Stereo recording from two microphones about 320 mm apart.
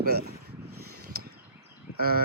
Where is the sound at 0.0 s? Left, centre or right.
Right.